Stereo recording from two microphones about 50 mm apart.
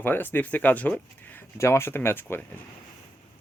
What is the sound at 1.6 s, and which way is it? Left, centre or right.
Speech, left.